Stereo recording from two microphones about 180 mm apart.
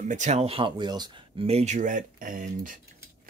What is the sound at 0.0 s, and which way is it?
Speech, 40° right (ahead or behind).